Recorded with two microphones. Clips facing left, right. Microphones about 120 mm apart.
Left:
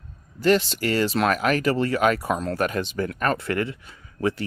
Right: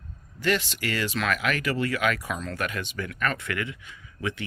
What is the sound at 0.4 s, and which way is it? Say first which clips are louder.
Speech: left 7 dB; 35° left (ahead or behind).